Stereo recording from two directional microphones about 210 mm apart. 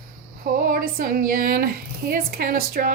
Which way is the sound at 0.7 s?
45° right (ahead or behind).